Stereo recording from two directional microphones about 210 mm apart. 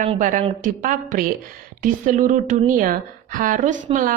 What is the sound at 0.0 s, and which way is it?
A woman's voice, 35° right (ahead or behind).